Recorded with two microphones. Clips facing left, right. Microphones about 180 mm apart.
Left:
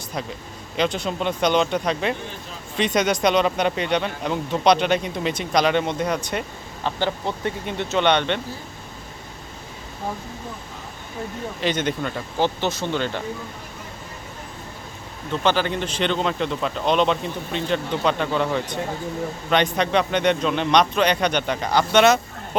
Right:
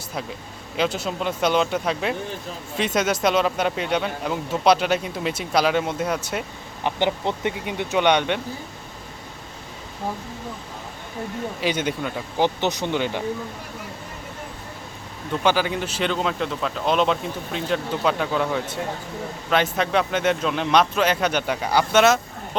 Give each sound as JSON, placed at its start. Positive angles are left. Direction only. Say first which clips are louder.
{"t": 0.8, "sound": "speech", "louder": "left 1 dB", "side_deg": -5}
{"t": 6.8, "sound": "speech", "louder": "right 2 dB", "side_deg": -20}
{"t": 11.6, "sound": "speech", "louder": "left 1 dB", "side_deg": -10}
{"t": 12.5, "sound": "speech", "louder": "right 1 dB", "side_deg": -20}
{"t": 15.3, "sound": "speech", "louder": "even", "side_deg": -10}